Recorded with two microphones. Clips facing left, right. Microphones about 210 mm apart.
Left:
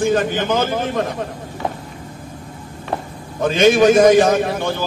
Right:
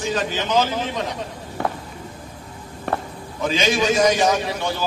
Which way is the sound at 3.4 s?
55° left (ahead or behind).